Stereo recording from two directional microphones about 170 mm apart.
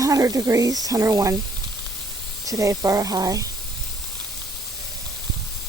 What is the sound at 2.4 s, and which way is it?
Speech, 20° right (ahead or behind).